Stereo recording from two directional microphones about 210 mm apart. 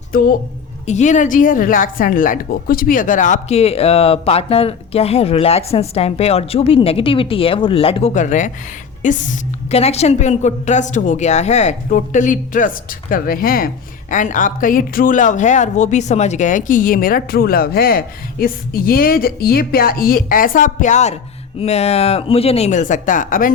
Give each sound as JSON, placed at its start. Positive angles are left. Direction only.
{"t": 0.1, "sound": "a woman's voice", "side_deg": 45}